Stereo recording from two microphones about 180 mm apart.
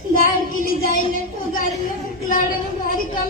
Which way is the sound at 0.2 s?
50° left (ahead or behind).